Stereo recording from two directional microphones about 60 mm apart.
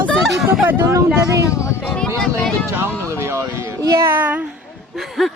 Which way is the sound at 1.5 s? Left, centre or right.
Left.